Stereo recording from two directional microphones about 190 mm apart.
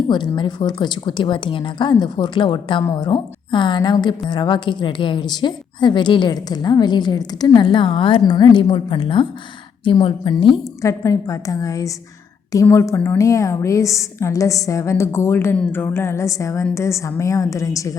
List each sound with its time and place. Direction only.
0.1 s a woman's voice: 25° left (ahead or behind)